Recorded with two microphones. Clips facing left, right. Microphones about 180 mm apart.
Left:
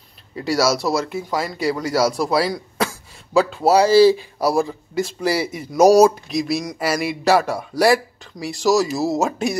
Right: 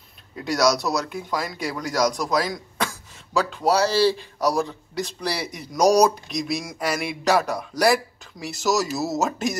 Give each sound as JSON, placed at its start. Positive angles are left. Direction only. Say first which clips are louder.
{"t": 0.4, "sound": "speech", "louder": "left 2 dB", "side_deg": 5}